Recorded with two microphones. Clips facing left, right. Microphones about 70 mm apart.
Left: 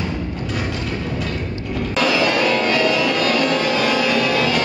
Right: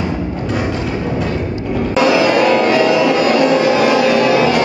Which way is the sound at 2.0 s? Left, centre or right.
Centre.